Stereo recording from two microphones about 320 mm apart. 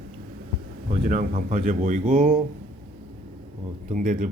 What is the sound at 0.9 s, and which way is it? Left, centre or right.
Speech, right.